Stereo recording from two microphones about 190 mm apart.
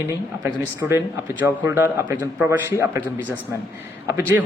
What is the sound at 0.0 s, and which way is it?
A man's voice, 15° right (ahead or behind).